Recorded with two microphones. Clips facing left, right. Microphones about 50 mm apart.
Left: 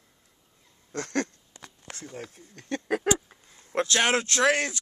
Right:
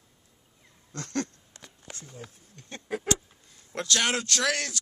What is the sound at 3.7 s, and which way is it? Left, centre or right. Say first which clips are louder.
Speech: left 4 dB; left.